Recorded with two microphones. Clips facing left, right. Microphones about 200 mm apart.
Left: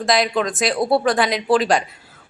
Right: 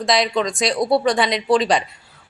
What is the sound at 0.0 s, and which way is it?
Speech, centre (ahead or behind).